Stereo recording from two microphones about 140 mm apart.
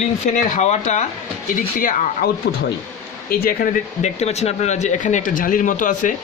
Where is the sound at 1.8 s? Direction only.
75° left (ahead or behind).